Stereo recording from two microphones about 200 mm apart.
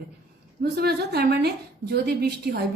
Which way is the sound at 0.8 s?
55° right (ahead or behind).